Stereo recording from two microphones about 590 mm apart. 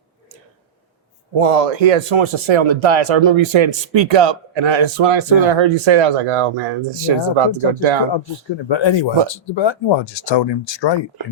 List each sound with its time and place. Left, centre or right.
1.4 s speech: right
8.6 s speech: left